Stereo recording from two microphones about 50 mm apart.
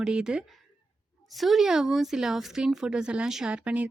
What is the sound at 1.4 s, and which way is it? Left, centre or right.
A woman's voice, centre.